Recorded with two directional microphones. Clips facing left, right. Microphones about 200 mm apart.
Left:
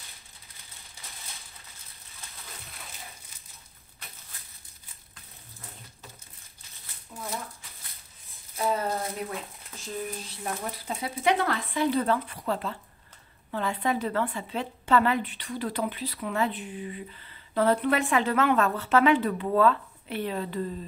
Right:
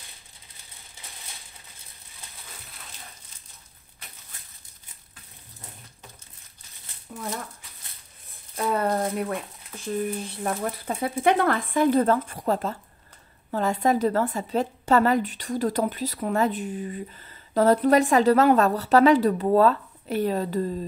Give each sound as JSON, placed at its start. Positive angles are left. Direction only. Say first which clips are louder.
{"t": 8.3, "sound": "a woman's voice", "louder": "right 2 dB", "side_deg": -55}